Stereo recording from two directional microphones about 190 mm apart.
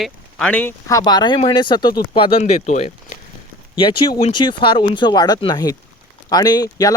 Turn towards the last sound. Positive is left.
turn(degrees=20)  # may be behind; listen again after turning